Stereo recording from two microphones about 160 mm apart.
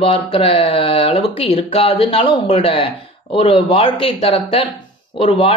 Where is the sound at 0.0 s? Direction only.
35° left (ahead or behind).